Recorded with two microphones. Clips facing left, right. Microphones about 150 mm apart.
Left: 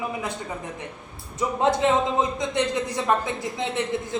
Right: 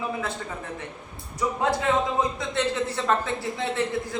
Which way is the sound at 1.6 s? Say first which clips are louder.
Left 4 dB; 20° left (ahead or behind).